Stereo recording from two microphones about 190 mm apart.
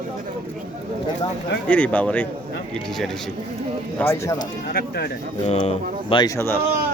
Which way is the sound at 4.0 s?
15° left (ahead or behind).